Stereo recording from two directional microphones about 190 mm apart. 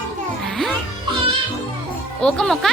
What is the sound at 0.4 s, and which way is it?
Music, centre (ahead or behind).